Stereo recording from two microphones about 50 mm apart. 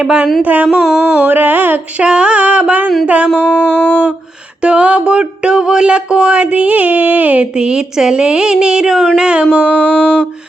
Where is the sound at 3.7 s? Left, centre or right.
Left.